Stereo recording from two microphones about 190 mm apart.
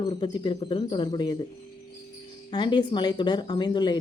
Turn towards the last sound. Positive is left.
turn(degrees=25)  # may be behind; listen again after turning